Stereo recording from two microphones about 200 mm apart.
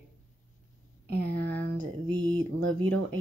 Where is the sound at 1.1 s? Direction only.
50° right (ahead or behind).